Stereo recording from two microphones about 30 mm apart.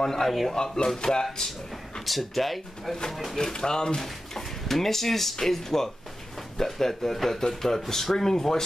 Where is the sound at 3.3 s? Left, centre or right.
Left.